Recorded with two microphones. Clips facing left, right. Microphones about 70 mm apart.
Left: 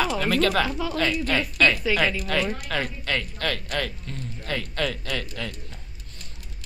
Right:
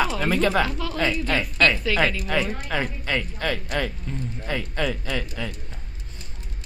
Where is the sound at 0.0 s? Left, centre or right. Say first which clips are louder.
Right 1 dB; centre.